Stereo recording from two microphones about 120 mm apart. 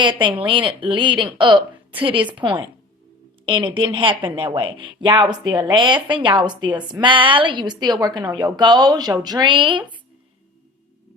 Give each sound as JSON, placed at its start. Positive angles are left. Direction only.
{"t": 0.0, "sound": "a woman's voice", "side_deg": -40}